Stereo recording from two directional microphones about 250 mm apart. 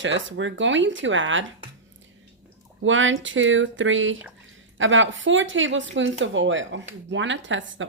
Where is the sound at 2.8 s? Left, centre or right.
Right.